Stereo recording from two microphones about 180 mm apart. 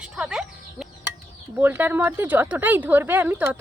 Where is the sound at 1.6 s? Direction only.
10° right (ahead or behind).